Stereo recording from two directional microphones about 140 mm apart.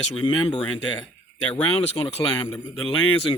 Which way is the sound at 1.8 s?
45° left (ahead or behind).